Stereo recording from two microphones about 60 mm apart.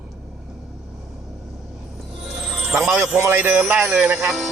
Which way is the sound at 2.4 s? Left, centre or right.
Centre.